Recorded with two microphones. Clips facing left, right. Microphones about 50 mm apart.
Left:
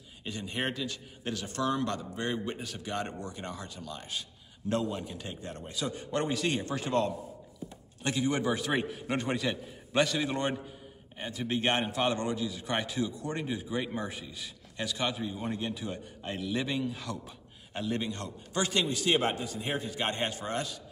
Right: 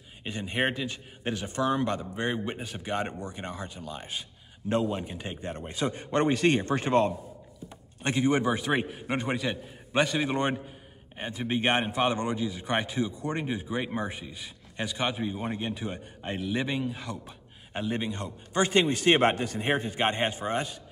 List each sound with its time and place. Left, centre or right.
0.2 s a man's voice: right
8.4 s a man's voice: centre
18.6 s a man's voice: right